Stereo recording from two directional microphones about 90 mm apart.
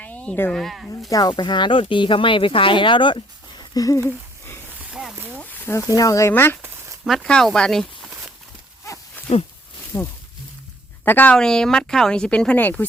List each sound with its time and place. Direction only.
0.0 s a sound: 15° left (ahead or behind)
0.5 s speech: centre (ahead or behind)
1.1 s speech: 50° left (ahead or behind)
3.8 s speech: 40° left (ahead or behind)
4.8 s a sound: 10° right (ahead or behind)
5.1 s a sound: 25° right (ahead or behind)
5.4 s a sound: 20° left (ahead or behind)
6.0 s speech: 40° left (ahead or behind)
6.3 s speech: 25° left (ahead or behind)
7.0 s speech: centre (ahead or behind)
9.9 s speech: 35° left (ahead or behind)
11.0 s speech: 20° left (ahead or behind)
11.3 s speech: 5° left (ahead or behind)